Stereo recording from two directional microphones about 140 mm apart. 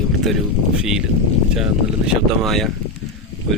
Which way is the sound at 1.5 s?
5° right (ahead or behind).